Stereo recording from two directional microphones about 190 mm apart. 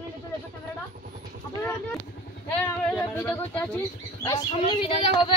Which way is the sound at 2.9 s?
10° left (ahead or behind).